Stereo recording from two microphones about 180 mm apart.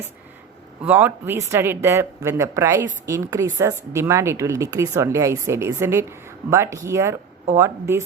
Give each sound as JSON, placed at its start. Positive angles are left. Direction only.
{"t": 0.9, "sound": "speech", "side_deg": -10}